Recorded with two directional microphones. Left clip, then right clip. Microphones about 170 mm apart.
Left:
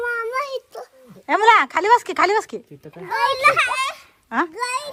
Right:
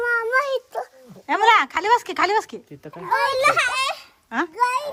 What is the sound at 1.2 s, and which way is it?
Speech, 10° right (ahead or behind).